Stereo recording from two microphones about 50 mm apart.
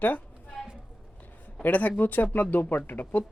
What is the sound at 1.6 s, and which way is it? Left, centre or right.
Speech, left.